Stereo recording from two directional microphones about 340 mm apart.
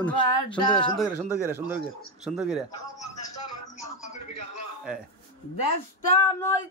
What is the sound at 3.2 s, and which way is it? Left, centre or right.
Music, left.